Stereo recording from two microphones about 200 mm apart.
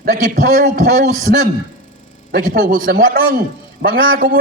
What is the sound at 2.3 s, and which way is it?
A man's voice, 45° right (ahead or behind).